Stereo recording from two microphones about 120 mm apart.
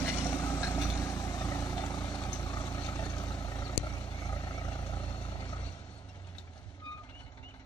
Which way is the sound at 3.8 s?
40° left (ahead or behind).